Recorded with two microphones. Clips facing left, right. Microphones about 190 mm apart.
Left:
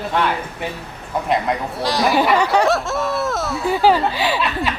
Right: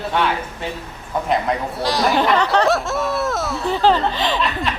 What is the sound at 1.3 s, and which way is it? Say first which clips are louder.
Speech: even; centre (ahead or behind).